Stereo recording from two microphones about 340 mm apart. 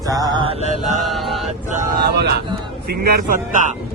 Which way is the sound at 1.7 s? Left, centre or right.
Right.